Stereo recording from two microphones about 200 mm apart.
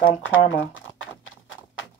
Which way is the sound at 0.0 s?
80° left.